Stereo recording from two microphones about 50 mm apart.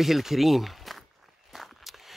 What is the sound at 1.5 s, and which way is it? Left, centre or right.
Walk, centre.